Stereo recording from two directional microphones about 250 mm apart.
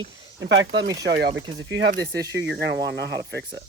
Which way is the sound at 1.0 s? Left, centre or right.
Right.